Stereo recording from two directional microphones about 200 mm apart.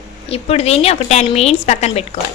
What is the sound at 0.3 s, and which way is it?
Speech, 30° left (ahead or behind).